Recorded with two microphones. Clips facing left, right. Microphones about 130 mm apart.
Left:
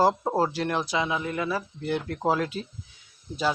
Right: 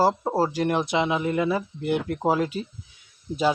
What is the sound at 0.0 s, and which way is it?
Speech, 10° right (ahead or behind).